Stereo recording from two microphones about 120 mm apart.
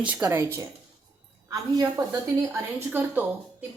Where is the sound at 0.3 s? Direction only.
20° right (ahead or behind).